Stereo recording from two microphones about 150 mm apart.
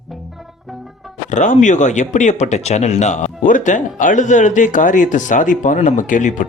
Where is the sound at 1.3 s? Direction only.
55° left (ahead or behind).